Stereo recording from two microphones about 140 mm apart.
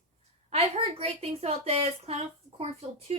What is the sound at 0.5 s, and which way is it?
A woman's voice, 45° right (ahead or behind).